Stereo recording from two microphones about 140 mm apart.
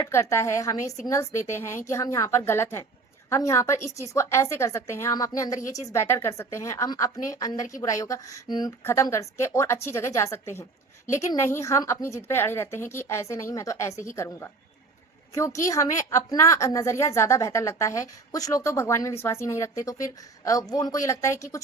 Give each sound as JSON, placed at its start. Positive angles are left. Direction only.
{"t": 0.0, "sound": "a woman's voice", "side_deg": 20}
{"t": 8.8, "sound": "a woman's voice", "side_deg": 20}